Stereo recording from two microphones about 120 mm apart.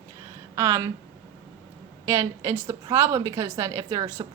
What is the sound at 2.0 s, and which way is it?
A woman's voice, 25° right (ahead or behind).